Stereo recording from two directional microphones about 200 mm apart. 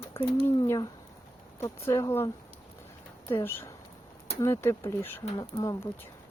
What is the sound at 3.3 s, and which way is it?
Speech, 10° left (ahead or behind).